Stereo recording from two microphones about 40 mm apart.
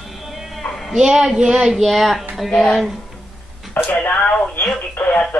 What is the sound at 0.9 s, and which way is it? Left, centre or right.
Speech, centre.